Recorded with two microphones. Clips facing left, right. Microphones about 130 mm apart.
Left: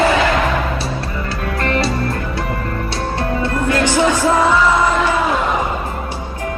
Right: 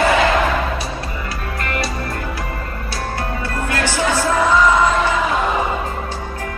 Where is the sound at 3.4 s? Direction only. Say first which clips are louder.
Left 5 dB; 20° left (ahead or behind).